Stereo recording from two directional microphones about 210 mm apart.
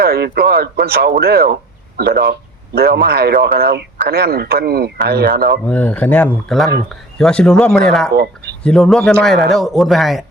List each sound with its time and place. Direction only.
0.0 s speech: 50° right (ahead or behind)
5.6 s speech: 5° left (ahead or behind)